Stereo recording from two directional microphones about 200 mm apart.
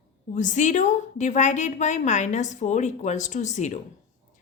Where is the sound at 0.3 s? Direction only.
40° left (ahead or behind).